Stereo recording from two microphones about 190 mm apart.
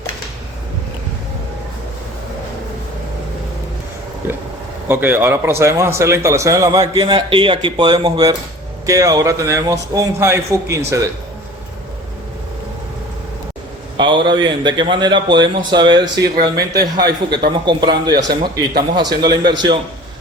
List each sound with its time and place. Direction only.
4.9 s a man's voice: 10° right (ahead or behind)
13.9 s a man's voice: 25° right (ahead or behind)